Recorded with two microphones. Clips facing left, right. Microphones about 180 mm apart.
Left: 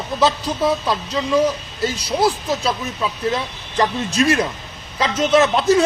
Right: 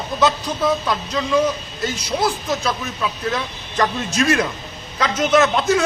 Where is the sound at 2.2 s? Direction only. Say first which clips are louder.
Left 3 dB; 30° left (ahead or behind).